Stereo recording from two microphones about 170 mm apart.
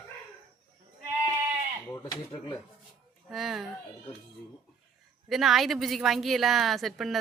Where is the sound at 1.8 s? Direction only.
15° left (ahead or behind).